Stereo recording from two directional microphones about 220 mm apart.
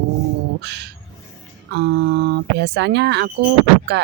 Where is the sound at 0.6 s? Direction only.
50° right (ahead or behind).